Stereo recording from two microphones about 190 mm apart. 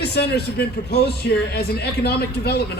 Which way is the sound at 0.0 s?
60° left (ahead or behind).